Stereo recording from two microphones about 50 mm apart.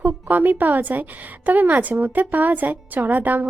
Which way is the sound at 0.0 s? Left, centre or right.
Right.